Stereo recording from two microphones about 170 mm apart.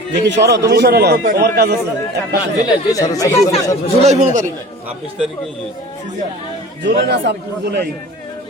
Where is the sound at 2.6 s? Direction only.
20° left (ahead or behind).